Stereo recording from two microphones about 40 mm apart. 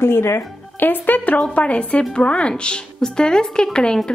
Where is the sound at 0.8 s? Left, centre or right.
Left.